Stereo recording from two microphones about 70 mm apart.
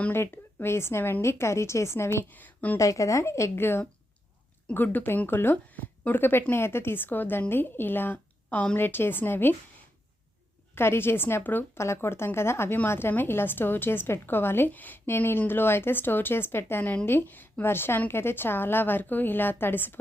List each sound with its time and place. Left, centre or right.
0.1 s a woman's voice: left
2.4 s speech: left
2.7 s speech: left
10.8 s a woman's voice: left